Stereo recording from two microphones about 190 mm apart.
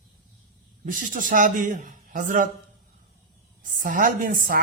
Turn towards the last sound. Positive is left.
turn(degrees=-50)  # may be behind; listen again after turning